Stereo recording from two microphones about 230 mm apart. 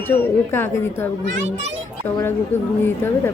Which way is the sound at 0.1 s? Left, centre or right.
Centre.